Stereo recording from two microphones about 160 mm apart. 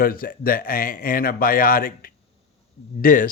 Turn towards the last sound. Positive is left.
turn(degrees=55)  # may be behind; listen again after turning